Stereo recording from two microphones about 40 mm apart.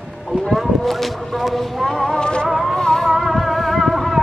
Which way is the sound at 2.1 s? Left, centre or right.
Left.